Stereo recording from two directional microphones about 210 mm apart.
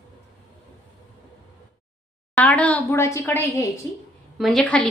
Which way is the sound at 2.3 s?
5° left (ahead or behind).